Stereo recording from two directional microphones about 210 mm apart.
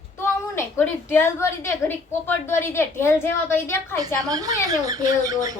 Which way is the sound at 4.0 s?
15° right (ahead or behind).